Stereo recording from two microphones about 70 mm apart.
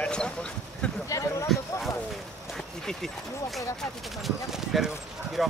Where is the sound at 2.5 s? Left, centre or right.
Centre.